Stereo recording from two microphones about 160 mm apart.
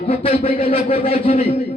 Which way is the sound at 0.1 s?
40° left (ahead or behind).